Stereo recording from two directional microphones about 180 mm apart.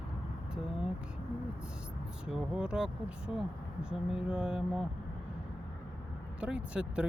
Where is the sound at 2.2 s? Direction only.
5° right (ahead or behind).